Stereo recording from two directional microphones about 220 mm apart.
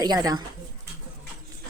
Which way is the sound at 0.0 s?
15° right (ahead or behind).